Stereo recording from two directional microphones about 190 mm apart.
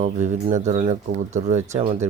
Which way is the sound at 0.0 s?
40° right (ahead or behind).